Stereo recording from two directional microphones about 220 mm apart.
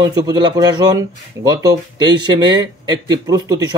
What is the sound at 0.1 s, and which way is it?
A man's voice, 15° right (ahead or behind).